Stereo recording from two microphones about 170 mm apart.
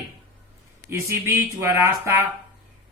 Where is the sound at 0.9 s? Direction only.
15° right (ahead or behind).